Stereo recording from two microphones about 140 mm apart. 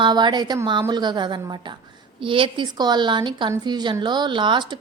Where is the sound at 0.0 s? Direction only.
30° right (ahead or behind).